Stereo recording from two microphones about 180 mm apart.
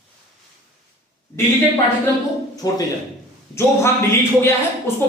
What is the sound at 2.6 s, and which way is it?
Speech, 20° left (ahead or behind).